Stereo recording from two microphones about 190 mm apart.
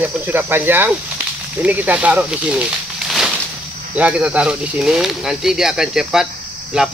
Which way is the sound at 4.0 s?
5° right (ahead or behind).